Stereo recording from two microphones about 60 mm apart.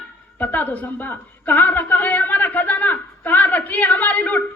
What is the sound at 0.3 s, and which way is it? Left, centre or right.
A woman's voice, left.